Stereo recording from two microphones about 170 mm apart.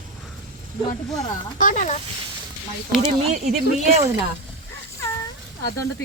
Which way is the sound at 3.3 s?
40° right (ahead or behind).